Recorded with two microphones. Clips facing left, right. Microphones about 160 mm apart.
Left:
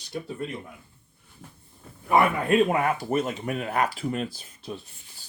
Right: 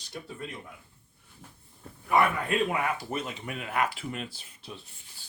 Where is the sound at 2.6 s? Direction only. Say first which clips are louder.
Left 6 dB; 45° left (ahead or behind).